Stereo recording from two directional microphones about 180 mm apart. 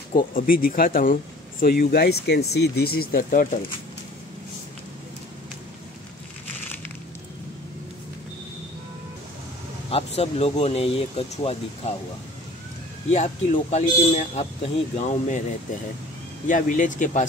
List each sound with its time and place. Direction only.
0.1 s speech: 50° left (ahead or behind)
9.8 s speech: 35° left (ahead or behind)
13.1 s speech: 40° left (ahead or behind)
16.4 s speech: 45° left (ahead or behind)